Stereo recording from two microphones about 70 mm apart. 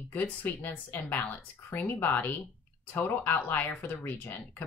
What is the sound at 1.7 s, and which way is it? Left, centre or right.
A woman's voice, left.